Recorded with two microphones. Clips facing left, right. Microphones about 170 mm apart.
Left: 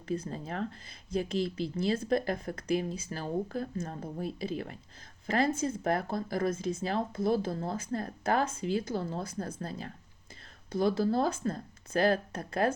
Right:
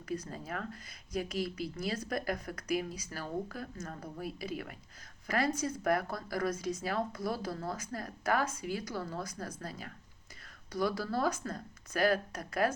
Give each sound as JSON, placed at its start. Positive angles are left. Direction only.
{"t": 0.1, "sound": "speech", "side_deg": 25}